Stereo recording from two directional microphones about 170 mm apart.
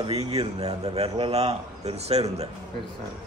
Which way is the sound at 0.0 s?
35° right (ahead or behind).